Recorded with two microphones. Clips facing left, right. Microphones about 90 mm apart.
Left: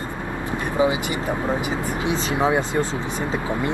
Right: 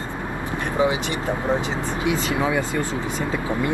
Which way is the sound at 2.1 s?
25° left (ahead or behind).